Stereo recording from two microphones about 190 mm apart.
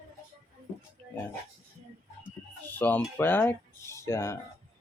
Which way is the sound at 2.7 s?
10° left (ahead or behind).